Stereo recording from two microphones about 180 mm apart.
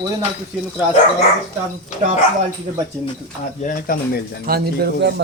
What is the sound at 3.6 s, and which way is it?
Speech, 55° left (ahead or behind).